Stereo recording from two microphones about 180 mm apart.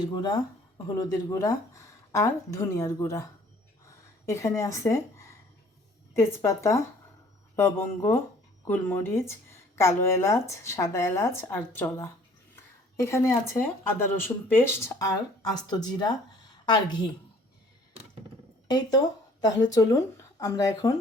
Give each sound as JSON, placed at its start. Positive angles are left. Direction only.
{"t": 0.1, "sound": "speech", "side_deg": 25}
{"t": 4.3, "sound": "speech", "side_deg": 15}
{"t": 19.4, "sound": "speech", "side_deg": 20}